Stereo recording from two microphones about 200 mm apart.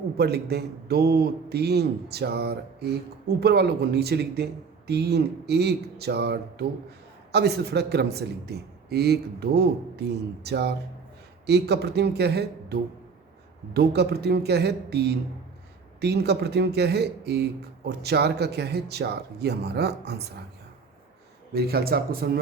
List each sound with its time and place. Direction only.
0.2 s a man's voice: 55° right (ahead or behind)
21.5 s a man's voice: 50° right (ahead or behind)